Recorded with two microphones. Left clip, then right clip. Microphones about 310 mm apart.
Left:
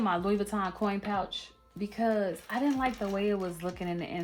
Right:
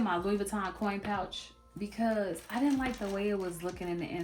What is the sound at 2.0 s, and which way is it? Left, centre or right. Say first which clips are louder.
Speech: left 3 dB; left.